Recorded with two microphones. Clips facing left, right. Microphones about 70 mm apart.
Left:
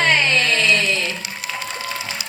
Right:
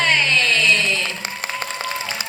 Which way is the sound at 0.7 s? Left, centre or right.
Right.